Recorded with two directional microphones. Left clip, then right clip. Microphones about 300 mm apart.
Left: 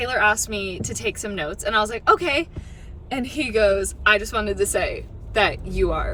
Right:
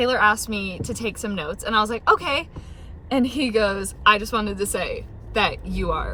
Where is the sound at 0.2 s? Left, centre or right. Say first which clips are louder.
Even; centre.